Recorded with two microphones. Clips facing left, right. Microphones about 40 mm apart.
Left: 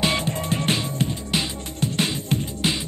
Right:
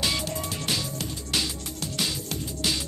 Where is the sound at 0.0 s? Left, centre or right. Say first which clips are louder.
Left 5 dB; left.